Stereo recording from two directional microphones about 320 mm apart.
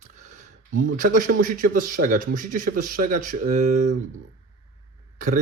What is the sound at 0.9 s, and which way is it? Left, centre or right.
Speech, right.